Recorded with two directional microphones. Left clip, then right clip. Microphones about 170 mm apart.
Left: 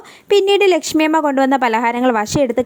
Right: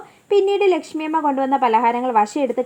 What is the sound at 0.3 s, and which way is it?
A woman's voice, 30° left (ahead or behind).